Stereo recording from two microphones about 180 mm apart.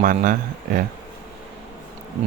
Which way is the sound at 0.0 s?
50° right (ahead or behind).